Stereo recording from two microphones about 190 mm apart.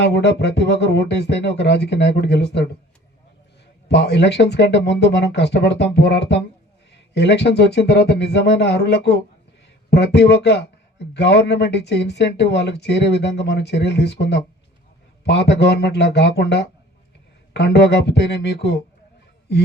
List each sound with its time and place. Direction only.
0.1 s speech: 60° left (ahead or behind)
3.8 s speech: 65° left (ahead or behind)